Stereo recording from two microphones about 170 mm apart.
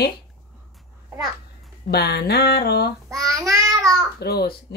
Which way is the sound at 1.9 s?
70° left (ahead or behind).